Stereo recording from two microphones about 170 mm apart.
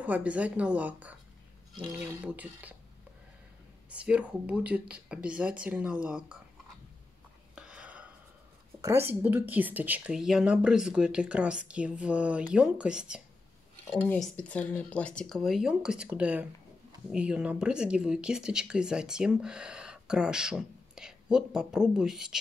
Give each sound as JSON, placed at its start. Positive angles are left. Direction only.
{"t": 0.0, "sound": "speech", "side_deg": -10}
{"t": 2.2, "sound": "speech", "side_deg": -10}
{"t": 3.9, "sound": "speech", "side_deg": -5}
{"t": 7.5, "sound": "chopping", "side_deg": -5}
{"t": 8.8, "sound": "speech", "side_deg": -15}
{"t": 13.9, "sound": "speech", "side_deg": 5}